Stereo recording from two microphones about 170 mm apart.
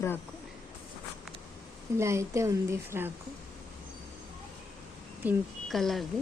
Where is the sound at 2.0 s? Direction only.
15° right (ahead or behind).